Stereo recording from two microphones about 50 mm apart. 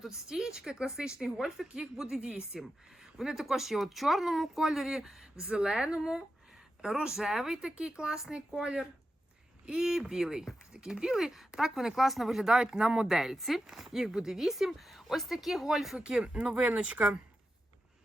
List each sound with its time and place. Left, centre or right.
0.3 s speech: centre
5.4 s speech: centre
16.0 s speech: centre